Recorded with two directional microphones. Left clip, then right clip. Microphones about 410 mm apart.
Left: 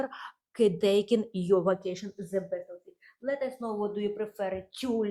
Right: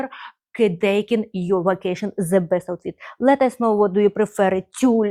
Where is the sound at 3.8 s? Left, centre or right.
Right.